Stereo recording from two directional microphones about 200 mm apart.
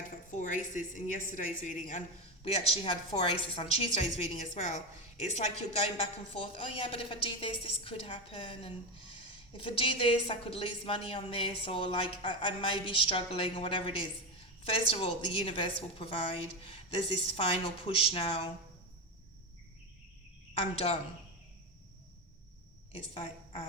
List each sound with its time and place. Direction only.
0.3 s a woman's voice: 40° left (ahead or behind)
20.5 s speech: 30° left (ahead or behind)
22.9 s a woman's voice: 25° left (ahead or behind)